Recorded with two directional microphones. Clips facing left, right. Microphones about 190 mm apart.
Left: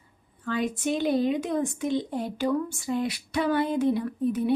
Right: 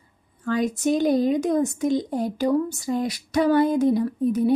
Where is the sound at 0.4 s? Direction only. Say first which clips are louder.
Right 5 dB; 40° right (ahead or behind).